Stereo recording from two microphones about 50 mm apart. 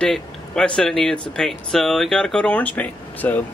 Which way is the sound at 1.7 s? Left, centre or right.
Centre.